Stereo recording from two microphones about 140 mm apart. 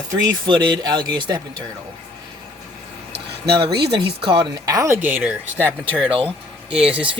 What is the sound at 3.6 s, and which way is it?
Speech, 35° right (ahead or behind).